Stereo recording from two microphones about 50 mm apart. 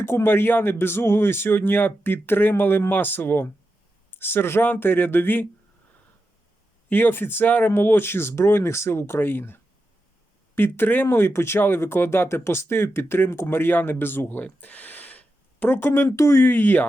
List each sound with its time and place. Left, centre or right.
0.0 s speech: left
6.9 s speech: left
14.3 s a sound: left
15.8 s speech: left
16.0 s speech: left
16.4 s speech: left